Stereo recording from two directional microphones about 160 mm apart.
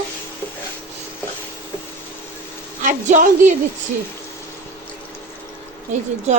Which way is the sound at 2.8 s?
50° right (ahead or behind).